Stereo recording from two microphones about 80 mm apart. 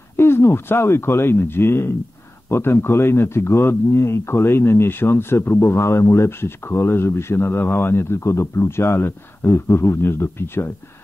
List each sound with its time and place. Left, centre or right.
0.1 s a man's voice: left